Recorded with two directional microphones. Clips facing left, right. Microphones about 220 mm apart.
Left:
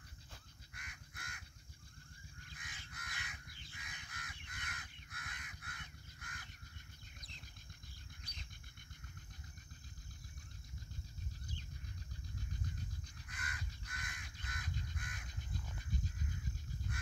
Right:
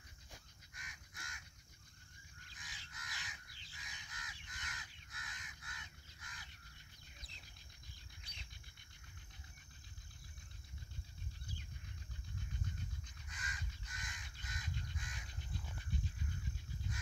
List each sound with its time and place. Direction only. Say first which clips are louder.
0.7 s crow: left 1 dB; 60° left (ahead or behind)
2.5 s crow: left 1 dB; 55° left (ahead or behind)
13.3 s crow: left 2 dB; 60° left (ahead or behind)